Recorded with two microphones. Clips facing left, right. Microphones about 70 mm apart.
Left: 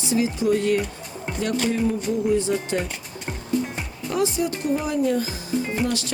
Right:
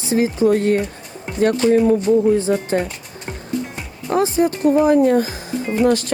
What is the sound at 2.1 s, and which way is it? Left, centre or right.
Music, right.